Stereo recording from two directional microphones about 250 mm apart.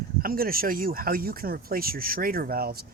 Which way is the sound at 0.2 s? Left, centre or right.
Right.